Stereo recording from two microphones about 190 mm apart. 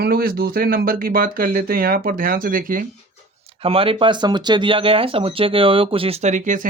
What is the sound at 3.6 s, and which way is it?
Speech, 30° right (ahead or behind).